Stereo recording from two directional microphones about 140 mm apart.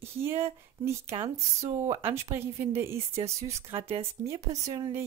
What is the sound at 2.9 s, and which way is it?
Speech, 45° right (ahead or behind).